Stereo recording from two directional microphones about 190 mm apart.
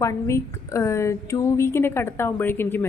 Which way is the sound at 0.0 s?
15° left (ahead or behind).